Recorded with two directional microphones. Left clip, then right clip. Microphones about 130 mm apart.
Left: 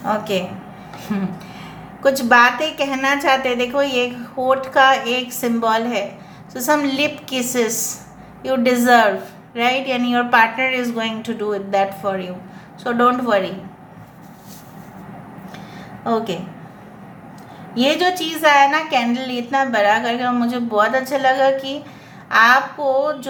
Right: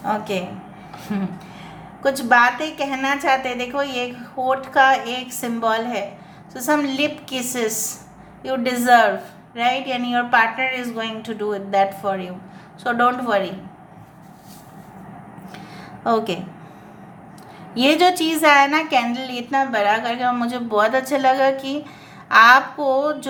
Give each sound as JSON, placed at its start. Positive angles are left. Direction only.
{"t": 0.0, "sound": "a woman's voice", "side_deg": -5}
{"t": 16.0, "sound": "a woman's voice", "side_deg": -35}
{"t": 17.7, "sound": "a woman's voice", "side_deg": -30}
{"t": 19.1, "sound": "speech", "side_deg": -15}